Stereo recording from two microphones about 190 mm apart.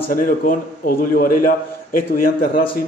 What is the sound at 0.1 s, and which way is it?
A man's voice, 50° left (ahead or behind).